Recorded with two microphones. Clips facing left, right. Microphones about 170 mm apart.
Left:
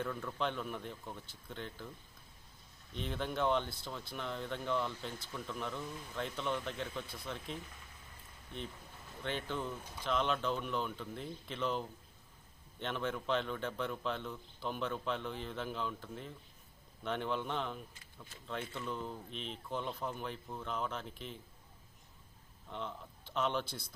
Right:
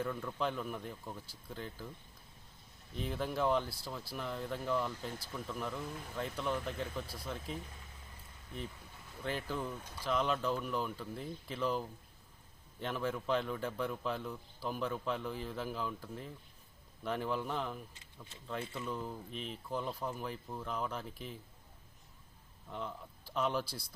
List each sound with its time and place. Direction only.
0.0 s speech: 5° right (ahead or behind)
2.9 s speech: 5° right (ahead or behind)
9.2 s speech: 5° right (ahead or behind)
9.7 s speech: 5° left (ahead or behind)
10.0 s speech: 5° right (ahead or behind)
17.9 s speech: 25° right (ahead or behind)
18.7 s speech: 5° right (ahead or behind)
22.7 s speech: 5° right (ahead or behind)